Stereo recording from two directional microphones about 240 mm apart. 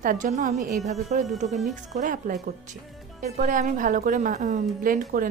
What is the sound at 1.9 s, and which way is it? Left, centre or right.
A woman's voice, right.